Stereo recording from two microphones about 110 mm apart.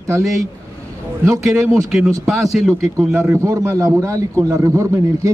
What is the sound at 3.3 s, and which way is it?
A man's voice, 25° right (ahead or behind).